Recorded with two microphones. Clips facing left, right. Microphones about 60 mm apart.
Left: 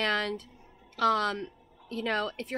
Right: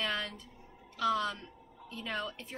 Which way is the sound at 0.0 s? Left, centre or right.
Left.